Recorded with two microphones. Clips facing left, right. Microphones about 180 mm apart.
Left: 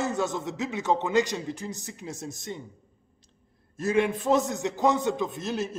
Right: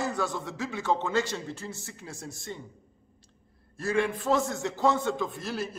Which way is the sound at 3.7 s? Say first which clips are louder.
Left 3 dB; 20° left (ahead or behind).